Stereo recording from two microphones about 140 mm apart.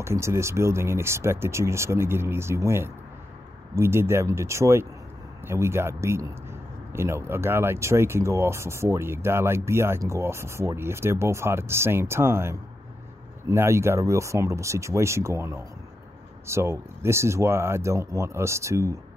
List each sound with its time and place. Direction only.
0.0 s speech: 20° right (ahead or behind)